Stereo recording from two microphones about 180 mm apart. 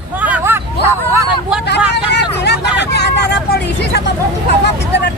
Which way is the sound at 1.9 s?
70° left (ahead or behind).